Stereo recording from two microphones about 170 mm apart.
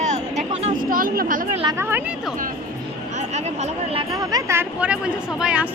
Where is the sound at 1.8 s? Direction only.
15° right (ahead or behind).